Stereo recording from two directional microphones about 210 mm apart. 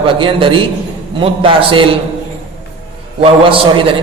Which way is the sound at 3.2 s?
25° right (ahead or behind).